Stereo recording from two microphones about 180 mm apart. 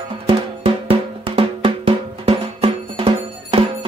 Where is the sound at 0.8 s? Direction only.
30° right (ahead or behind).